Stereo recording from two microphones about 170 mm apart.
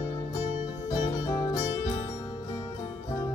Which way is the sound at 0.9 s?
20° left (ahead or behind).